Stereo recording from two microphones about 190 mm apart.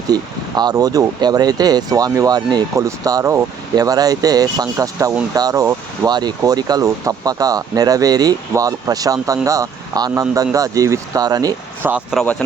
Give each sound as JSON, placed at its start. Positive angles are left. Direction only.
{"t": 0.1, "sound": "speech", "side_deg": -20}